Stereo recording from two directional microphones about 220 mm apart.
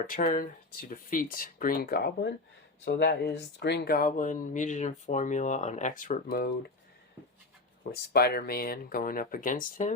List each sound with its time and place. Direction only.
0.1 s speech: 40° left (ahead or behind)
7.9 s speech: 45° left (ahead or behind)